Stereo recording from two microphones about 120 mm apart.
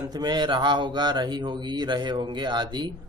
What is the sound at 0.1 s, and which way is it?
Speech, 35° right (ahead or behind).